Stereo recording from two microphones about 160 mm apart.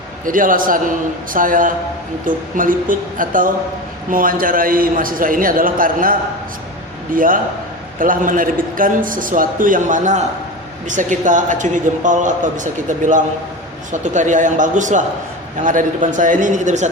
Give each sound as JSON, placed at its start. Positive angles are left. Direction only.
{"t": 0.3, "sound": "a man's voice", "side_deg": -60}